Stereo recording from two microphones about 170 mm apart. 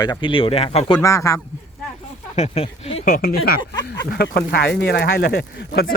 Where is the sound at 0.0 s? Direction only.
25° left (ahead or behind).